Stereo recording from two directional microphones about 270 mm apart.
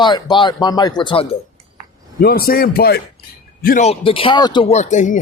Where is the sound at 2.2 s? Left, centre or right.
Left.